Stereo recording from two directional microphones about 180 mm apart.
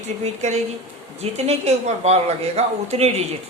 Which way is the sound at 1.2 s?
35° right (ahead or behind).